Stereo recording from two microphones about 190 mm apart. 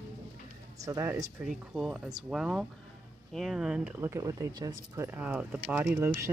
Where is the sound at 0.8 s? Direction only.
15° right (ahead or behind).